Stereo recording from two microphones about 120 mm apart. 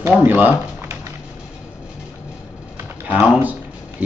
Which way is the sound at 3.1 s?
5° right (ahead or behind).